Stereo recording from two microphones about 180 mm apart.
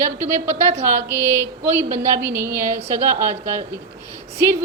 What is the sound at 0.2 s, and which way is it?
A woman's voice, 15° right (ahead or behind).